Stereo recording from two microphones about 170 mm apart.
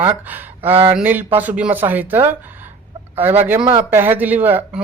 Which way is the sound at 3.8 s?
10° right (ahead or behind).